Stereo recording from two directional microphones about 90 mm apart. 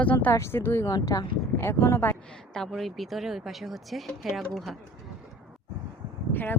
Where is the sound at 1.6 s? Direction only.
30° left (ahead or behind).